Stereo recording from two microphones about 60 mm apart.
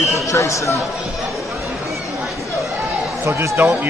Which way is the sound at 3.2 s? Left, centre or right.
Right.